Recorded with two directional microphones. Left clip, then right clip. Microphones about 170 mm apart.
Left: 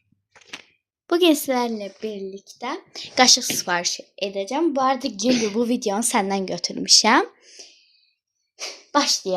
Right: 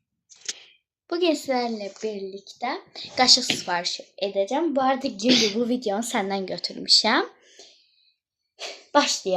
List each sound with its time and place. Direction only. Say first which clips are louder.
1.0 s speech: left 5 dB; 90° left; by 5.2 s 40° left (ahead or behind)
5.3 s a woman's voice: right 3 dB; 5° left (ahead or behind)
5.5 s speech: left 2 dB; 55° left (ahead or behind)
7.4 s a sound: left 4 dB; 45° left (ahead or behind)